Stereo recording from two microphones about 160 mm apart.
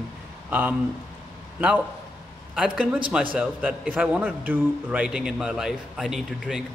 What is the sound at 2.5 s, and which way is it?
A man's voice, 5° right (ahead or behind).